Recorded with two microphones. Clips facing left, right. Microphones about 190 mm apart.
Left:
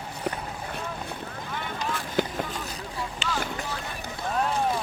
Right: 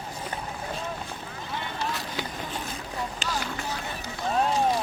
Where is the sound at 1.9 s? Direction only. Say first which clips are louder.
Left 6 dB; 50° left (ahead or behind).